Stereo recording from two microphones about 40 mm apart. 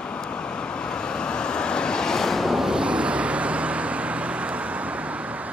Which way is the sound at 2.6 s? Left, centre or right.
Right.